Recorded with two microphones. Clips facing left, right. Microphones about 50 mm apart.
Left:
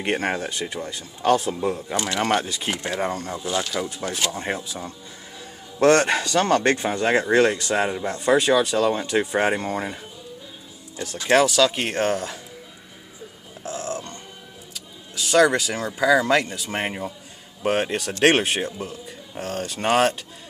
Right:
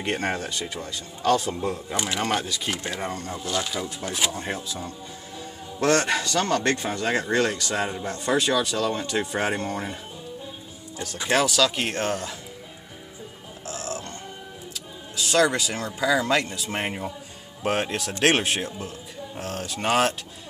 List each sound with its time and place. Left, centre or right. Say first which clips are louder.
0.0 s speech: left 3 dB; left
2.4 s speech: left 1 dB; left
2.7 s speech: left 7 dB; centre
5.8 s speech: left 5 dB; left
11.2 s speech: left 4 dB; centre
13.7 s music: left 4 dB; centre
15.1 s speech: left 4 dB; centre